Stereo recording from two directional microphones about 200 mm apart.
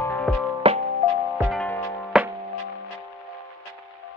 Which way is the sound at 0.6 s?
30° right (ahead or behind).